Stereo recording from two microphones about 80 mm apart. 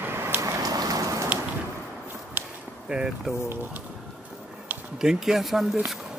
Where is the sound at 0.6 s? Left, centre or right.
Right.